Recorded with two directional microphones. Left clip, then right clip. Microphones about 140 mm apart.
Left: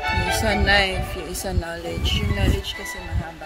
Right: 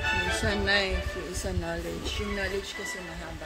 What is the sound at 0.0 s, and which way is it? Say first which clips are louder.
Music: left 5 dB; 35° left (ahead or behind).